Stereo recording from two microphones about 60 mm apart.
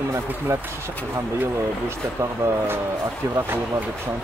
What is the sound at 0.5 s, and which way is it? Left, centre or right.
Speech, right.